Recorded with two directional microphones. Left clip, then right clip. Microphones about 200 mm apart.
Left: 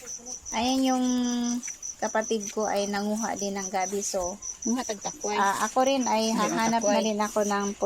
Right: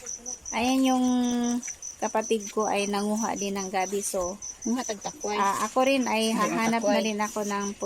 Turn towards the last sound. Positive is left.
turn(degrees=0)  # may be behind; listen again after turning